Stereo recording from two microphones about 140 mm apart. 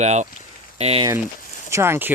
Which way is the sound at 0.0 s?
55° right (ahead or behind).